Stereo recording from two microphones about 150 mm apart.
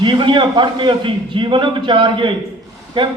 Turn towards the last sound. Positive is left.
turn(degrees=-35)  # may be behind; listen again after turning